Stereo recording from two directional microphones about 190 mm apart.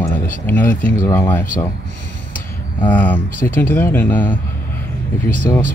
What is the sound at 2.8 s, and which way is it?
Speech, 10° left (ahead or behind).